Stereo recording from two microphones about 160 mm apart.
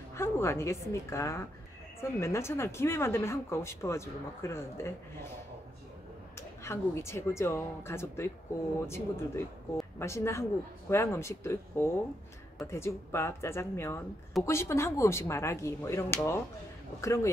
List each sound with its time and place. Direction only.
0.1 s speech: 15° left (ahead or behind)
6.6 s speech: 15° left (ahead or behind)